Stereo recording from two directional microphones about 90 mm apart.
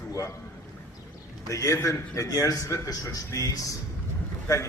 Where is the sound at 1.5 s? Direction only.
35° left (ahead or behind).